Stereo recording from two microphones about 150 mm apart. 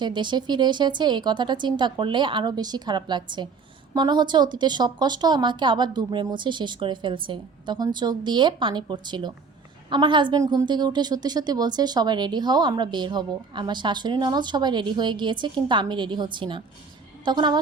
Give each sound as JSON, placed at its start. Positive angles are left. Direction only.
{"t": 0.0, "sound": "a woman's voice", "side_deg": -30}